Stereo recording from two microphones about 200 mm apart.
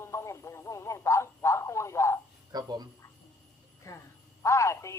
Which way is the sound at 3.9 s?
15° left (ahead or behind).